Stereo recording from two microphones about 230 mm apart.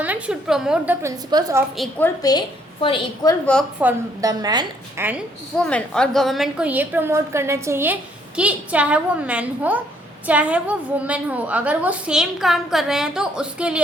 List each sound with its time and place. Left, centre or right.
0.0 s a woman's voice: centre
1.7 s a woman's voice: centre
2.8 s a woman's voice: left
3.8 s a woman's voice: centre
5.5 s a woman's voice: centre